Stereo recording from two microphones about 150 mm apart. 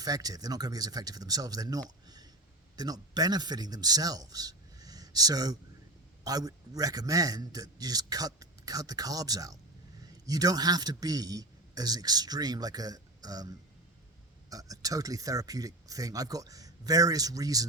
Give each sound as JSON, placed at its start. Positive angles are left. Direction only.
{"t": 0.0, "sound": "a man's voice", "side_deg": -25}